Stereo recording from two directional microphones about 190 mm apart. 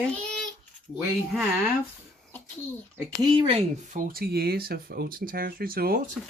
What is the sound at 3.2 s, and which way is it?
Speech, 25° right (ahead or behind).